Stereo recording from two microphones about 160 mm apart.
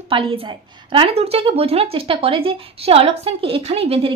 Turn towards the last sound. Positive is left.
turn(degrees=-35)  # may be behind; listen again after turning